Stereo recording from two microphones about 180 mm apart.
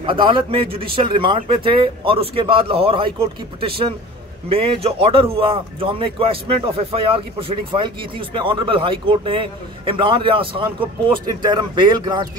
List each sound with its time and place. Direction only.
0.0 s a man's voice: 25° right (ahead or behind)